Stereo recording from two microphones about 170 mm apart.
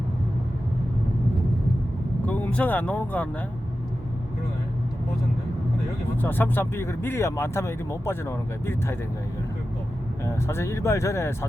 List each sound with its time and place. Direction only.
2.2 s speech: 10° left (ahead or behind)
6.2 s speech: 10° left (ahead or behind)
10.2 s speech: 15° left (ahead or behind)